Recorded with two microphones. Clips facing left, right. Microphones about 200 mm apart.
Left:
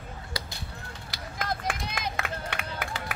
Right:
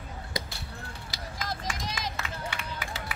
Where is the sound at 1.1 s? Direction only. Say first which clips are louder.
Left 4 dB; 60° left (ahead or behind).